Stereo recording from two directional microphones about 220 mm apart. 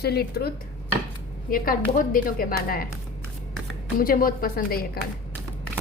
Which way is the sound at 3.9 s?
40° left (ahead or behind).